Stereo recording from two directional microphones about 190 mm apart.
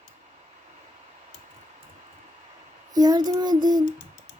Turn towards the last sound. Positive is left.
turn(degrees=-20)  # may be behind; listen again after turning